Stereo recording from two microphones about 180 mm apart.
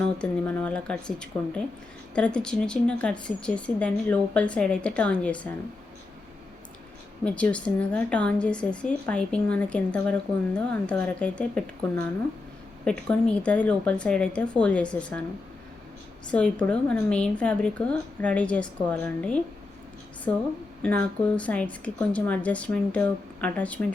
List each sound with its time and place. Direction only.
0.2 s a woman's voice: 5° left (ahead or behind)
7.3 s a woman's voice: 5° left (ahead or behind)
12.8 s a woman's voice: 5° left (ahead or behind)
16.3 s a woman's voice: 5° left (ahead or behind)
20.8 s a woman's voice: 5° left (ahead or behind)